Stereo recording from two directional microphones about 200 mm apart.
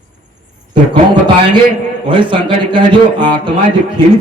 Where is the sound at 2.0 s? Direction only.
25° right (ahead or behind).